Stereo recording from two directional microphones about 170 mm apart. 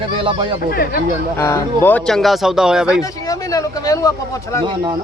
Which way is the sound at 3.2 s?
20° left (ahead or behind).